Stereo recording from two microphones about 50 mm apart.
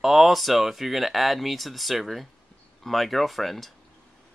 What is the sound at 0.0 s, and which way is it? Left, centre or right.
Speech, centre.